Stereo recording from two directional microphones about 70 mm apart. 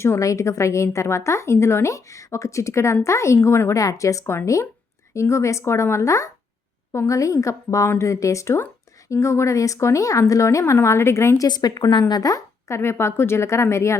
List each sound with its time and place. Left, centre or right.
0.0 s a woman's voice: left
11.3 s speech: left
12.3 s speech: left